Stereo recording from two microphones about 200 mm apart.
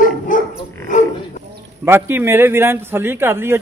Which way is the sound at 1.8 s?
10° right (ahead or behind).